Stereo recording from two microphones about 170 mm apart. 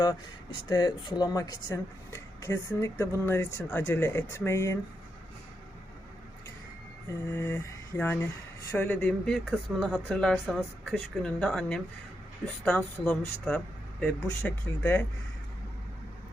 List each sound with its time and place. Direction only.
0.7 s speech: 25° left (ahead or behind)
7.3 s a sound: 10° left (ahead or behind)
8.7 s a woman's voice: 10° left (ahead or behind)